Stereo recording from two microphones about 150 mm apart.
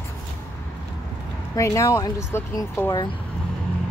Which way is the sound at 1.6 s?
20° left (ahead or behind).